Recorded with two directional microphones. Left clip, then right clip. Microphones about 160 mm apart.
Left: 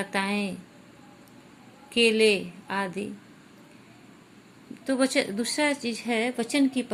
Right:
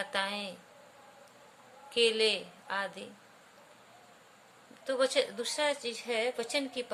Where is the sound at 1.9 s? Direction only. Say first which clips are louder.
Left 6 dB; 15° left (ahead or behind).